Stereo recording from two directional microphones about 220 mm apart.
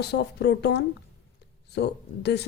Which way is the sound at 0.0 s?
50° left (ahead or behind).